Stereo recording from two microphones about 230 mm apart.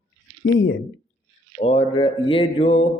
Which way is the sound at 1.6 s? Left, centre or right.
Left.